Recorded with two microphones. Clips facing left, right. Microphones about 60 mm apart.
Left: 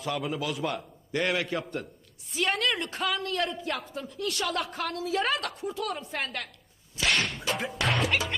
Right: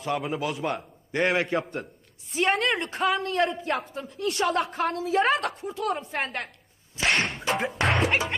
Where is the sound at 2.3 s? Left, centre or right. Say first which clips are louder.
Right 4 dB; right.